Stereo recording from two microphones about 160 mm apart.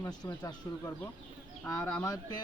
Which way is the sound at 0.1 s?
25° left (ahead or behind).